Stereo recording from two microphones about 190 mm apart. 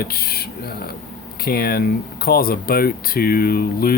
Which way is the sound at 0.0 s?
55° left (ahead or behind).